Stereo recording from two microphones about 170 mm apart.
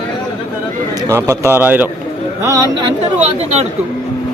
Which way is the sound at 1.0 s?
15° right (ahead or behind).